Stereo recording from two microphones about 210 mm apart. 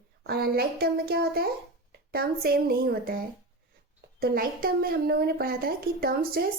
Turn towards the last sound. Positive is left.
turn(degrees=-45)  # may be behind; listen again after turning